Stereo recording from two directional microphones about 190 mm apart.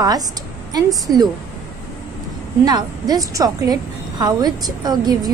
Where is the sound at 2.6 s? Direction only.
20° right (ahead or behind).